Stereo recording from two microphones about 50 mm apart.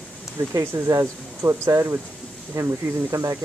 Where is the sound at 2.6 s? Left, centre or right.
Right.